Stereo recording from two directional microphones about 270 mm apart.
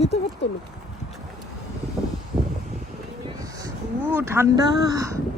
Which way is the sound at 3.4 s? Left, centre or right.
Centre.